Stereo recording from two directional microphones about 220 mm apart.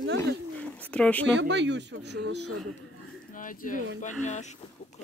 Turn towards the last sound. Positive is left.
turn(degrees=35)  # may be behind; listen again after turning